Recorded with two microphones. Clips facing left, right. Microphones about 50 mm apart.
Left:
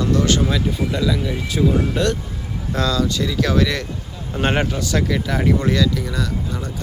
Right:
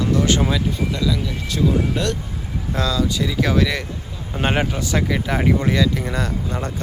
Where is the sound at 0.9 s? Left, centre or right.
Centre.